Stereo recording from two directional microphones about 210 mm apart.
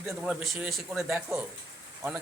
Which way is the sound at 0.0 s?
5° right (ahead or behind).